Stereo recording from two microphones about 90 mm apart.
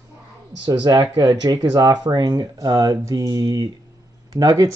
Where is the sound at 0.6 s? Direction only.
50° right (ahead or behind).